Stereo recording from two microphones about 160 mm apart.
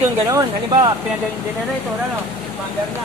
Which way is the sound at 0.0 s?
15° right (ahead or behind).